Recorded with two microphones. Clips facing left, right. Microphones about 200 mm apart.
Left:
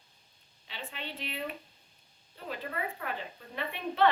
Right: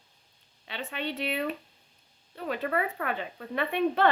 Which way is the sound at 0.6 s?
70° right (ahead or behind).